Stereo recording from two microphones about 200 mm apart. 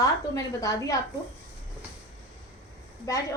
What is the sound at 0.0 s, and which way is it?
Speech, 15° left (ahead or behind).